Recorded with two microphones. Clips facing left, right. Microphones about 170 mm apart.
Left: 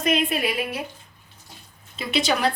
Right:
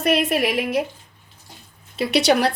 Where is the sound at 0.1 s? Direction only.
75° right (ahead or behind).